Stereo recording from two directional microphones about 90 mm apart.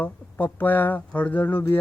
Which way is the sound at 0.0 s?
20° left (ahead or behind).